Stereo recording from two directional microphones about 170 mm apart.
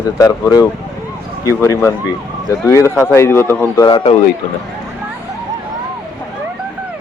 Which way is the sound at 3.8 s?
30° left (ahead or behind).